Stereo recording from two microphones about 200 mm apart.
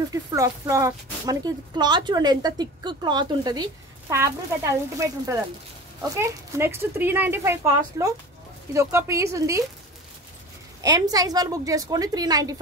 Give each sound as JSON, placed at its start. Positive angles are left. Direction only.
{"t": 0.1, "sound": "speech", "side_deg": -15}
{"t": 10.8, "sound": "speech", "side_deg": -20}